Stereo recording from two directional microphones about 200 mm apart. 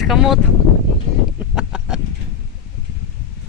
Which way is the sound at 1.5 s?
5° right (ahead or behind).